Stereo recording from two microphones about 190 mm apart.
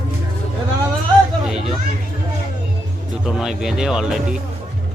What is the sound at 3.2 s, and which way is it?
Speech, centre (ahead or behind).